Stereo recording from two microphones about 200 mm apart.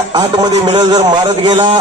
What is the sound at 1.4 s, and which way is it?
Speech, 25° right (ahead or behind).